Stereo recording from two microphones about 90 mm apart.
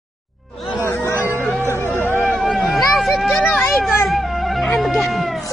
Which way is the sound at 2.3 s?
Centre (ahead or behind).